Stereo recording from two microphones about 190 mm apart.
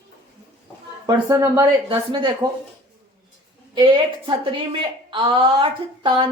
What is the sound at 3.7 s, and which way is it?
A woman's voice, 25° right (ahead or behind).